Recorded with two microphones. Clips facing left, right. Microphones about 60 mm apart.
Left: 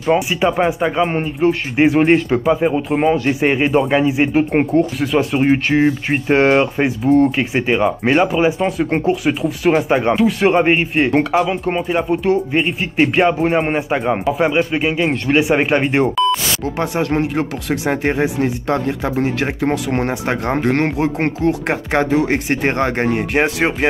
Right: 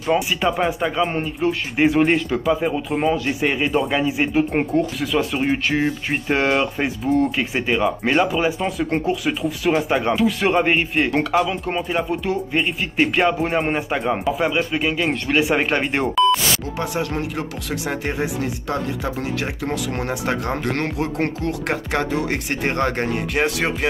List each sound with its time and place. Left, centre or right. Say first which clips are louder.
0.0 s speech: left 4 dB; centre
16.7 s speech: left 6 dB; left